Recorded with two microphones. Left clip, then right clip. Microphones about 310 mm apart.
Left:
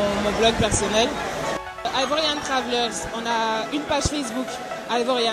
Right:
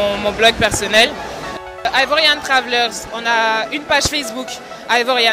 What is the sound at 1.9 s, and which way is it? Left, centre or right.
Speech, right.